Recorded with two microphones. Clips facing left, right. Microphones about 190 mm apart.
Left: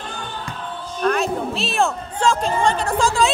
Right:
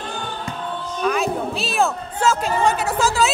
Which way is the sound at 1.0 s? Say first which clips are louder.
Left 1 dB; centre (ahead or behind).